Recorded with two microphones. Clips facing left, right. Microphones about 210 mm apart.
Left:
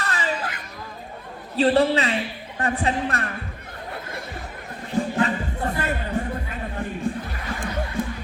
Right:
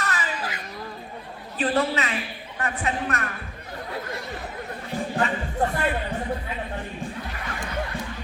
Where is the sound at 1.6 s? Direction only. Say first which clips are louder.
Left 5 dB; 30° left (ahead or behind).